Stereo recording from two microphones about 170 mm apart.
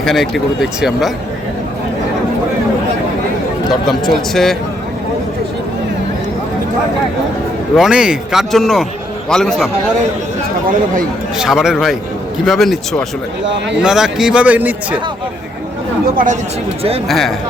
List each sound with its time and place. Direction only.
0.0 s a man's voice: centre (ahead or behind)
3.8 s a man's voice: centre (ahead or behind)
7.8 s a man's voice: 5° right (ahead or behind)
11.3 s a man's voice: 5° right (ahead or behind)
16.1 s speech: 50° right (ahead or behind)
17.1 s a man's voice: centre (ahead or behind)